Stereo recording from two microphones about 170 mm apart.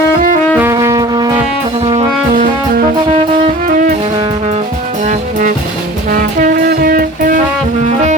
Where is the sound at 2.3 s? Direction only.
50° right (ahead or behind).